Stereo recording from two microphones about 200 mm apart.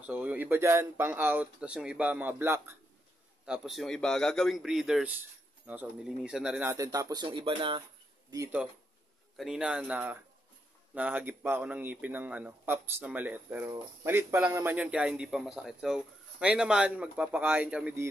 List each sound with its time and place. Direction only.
0.0 s a man's voice: 5° right (ahead or behind)
9.4 s a man's voice: 5° right (ahead or behind)